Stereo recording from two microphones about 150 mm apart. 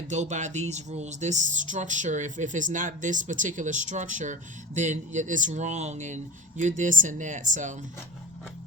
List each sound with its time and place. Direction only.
0.1 s speech: 55° right (ahead or behind)